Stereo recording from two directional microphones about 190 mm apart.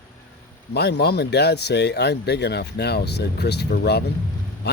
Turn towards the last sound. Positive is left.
turn(degrees=60)  # may be behind; listen again after turning